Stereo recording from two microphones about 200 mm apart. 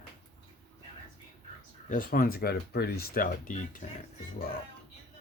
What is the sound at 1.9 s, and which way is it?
Speech, 45° left (ahead or behind).